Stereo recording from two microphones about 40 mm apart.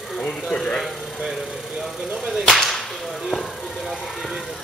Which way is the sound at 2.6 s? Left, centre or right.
Centre.